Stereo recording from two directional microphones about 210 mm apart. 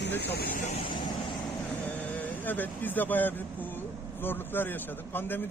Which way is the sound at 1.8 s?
10° left (ahead or behind).